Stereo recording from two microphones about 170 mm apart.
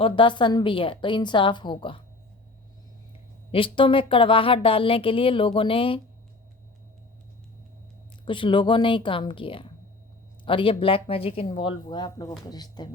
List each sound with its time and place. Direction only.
0.0 s a woman's voice: 30° left (ahead or behind)
3.5 s speech: 30° left (ahead or behind)
8.2 s a woman's voice: 30° left (ahead or behind)